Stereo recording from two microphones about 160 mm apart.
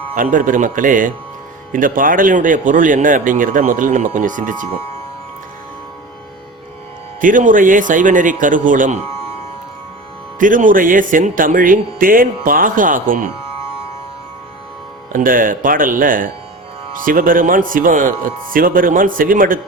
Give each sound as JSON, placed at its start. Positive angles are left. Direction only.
{"t": 0.2, "sound": "speech", "side_deg": -55}
{"t": 7.2, "sound": "speech", "side_deg": -55}
{"t": 10.4, "sound": "speech", "side_deg": -55}
{"t": 15.1, "sound": "speech", "side_deg": -60}